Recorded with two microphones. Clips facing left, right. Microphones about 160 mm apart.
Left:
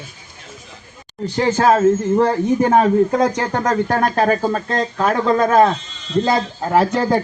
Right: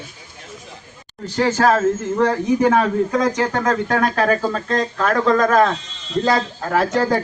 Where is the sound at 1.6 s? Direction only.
30° left (ahead or behind).